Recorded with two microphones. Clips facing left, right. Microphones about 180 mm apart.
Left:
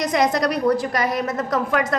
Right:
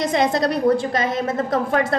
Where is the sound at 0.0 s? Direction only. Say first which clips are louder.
Right 1 dB; 25° right (ahead or behind).